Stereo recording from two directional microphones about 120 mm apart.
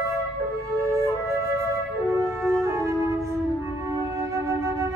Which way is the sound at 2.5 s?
25° right (ahead or behind).